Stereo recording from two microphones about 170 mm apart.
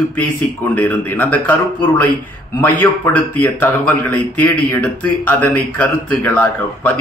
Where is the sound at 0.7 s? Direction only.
10° left (ahead or behind).